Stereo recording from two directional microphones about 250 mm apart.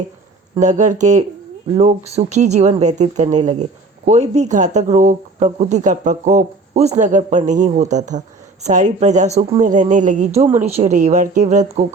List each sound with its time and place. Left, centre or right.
0.5 s speech: right